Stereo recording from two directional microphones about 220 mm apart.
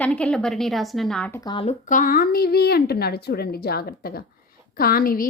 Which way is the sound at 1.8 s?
35° left (ahead or behind).